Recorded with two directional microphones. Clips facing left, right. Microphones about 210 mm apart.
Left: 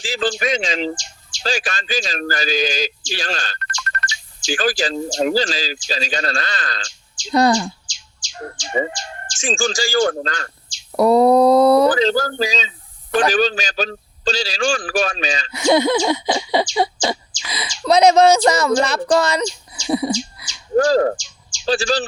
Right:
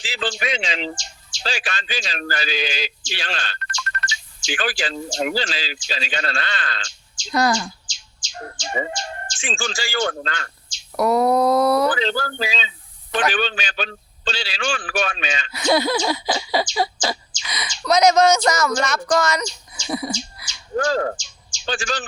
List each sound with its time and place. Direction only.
0.0 s a man's voice: 45° left (ahead or behind)
9.4 s a man's voice: 45° left (ahead or behind)
10.9 s a sound: 30° left (ahead or behind)
11.9 s a man's voice: 40° left (ahead or behind)
15.5 s a sound: 20° left (ahead or behind)
20.7 s a man's voice: 35° left (ahead or behind)